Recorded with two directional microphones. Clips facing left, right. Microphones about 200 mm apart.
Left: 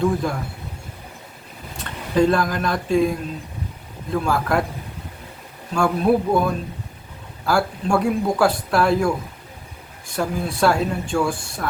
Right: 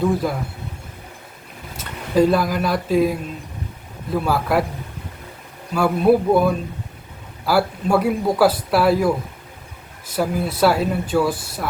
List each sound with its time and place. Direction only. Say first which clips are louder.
0.0 s speech: right 1 dB; 5° right (ahead or behind)
1.7 s speech: right 2 dB; 5° right (ahead or behind)
5.7 s speech: right 2 dB; 5° right (ahead or behind)
10.2 s speech: right 2 dB; 5° right (ahead or behind)